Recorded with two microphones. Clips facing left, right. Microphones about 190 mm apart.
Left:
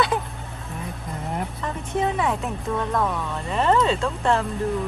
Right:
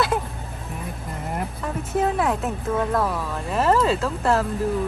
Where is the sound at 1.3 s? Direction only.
5° right (ahead or behind).